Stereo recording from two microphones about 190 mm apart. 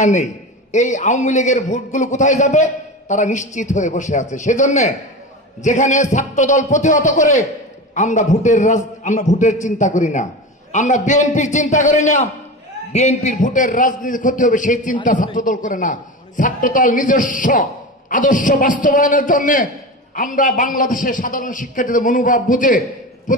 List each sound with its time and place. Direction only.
0.0 s a man's voice: 40° left (ahead or behind)